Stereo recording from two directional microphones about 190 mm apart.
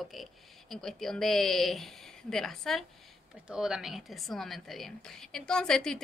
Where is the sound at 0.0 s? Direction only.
Centre (ahead or behind).